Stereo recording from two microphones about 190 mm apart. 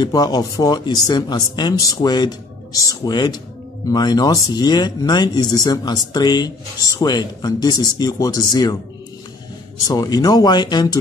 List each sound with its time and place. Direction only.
0.0 s speech: 20° left (ahead or behind)
9.8 s speech: 20° left (ahead or behind)